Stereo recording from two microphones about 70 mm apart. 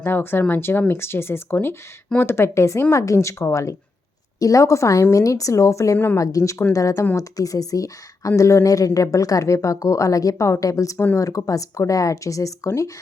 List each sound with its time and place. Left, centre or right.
0.0 s a woman's voice: left
4.4 s a woman's voice: left
10.9 s speech: left
11.2 s a woman's voice: left